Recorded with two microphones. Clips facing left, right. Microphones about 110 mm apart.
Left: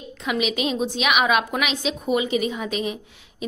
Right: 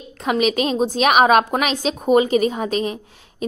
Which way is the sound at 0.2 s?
45° right (ahead or behind).